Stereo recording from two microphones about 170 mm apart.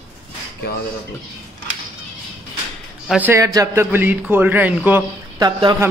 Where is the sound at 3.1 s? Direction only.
10° right (ahead or behind).